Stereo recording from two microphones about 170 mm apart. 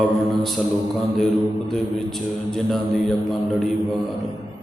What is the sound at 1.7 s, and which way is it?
A man's voice, 5° left (ahead or behind).